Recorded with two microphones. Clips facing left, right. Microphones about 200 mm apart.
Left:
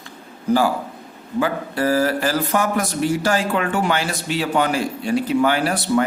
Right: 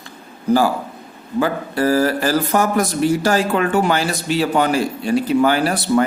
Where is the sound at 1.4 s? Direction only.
40° right (ahead or behind).